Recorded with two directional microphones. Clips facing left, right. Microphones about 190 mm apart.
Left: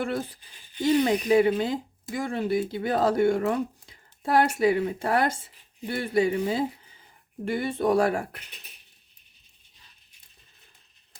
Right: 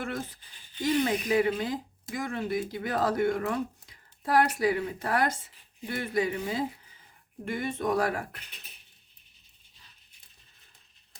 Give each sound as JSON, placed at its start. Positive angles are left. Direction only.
{"t": 0.8, "sound": "speech", "side_deg": 25}